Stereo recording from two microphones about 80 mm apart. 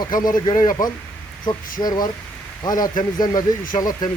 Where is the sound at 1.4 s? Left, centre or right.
Left.